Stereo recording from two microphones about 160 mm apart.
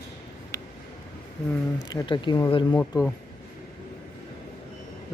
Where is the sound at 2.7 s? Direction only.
10° left (ahead or behind).